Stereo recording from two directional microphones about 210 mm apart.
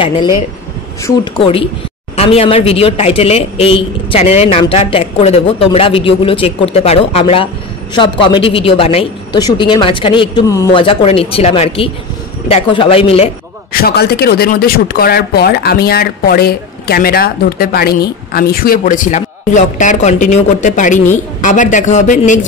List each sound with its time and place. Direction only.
1.0 s a man's voice: 25° left (ahead or behind)
10.8 s a man's voice: 25° left (ahead or behind)
13.7 s speech: 50° left (ahead or behind)